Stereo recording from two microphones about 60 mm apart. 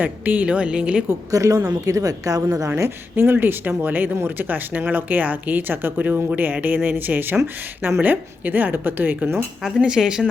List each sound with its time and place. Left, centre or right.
0.0 s a woman's voice: right
1.3 s a woman's voice: right
3.3 s speech: right
9.8 s a woman's voice: centre